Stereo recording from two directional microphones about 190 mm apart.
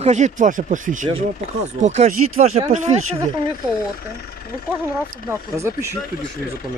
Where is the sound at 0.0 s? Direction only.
40° right (ahead or behind).